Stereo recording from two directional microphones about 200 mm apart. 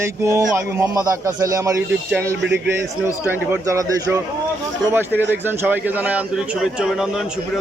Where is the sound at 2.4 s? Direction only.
60° right (ahead or behind).